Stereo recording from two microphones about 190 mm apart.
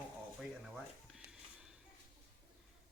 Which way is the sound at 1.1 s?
Centre (ahead or behind).